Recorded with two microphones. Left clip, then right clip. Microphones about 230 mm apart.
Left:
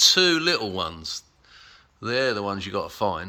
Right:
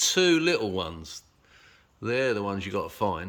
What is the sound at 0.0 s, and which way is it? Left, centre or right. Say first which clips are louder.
Speech: left 4 dB; centre.